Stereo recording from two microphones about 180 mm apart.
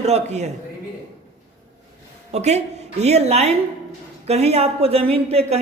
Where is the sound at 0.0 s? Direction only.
40° right (ahead or behind).